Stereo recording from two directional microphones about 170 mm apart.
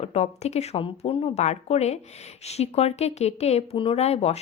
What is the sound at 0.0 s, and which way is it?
Speech, 40° left (ahead or behind).